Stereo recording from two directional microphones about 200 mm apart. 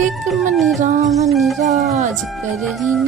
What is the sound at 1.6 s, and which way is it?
Speech, 35° right (ahead or behind).